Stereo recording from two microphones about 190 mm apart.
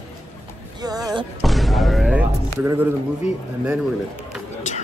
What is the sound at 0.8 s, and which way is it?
Music, 20° right (ahead or behind).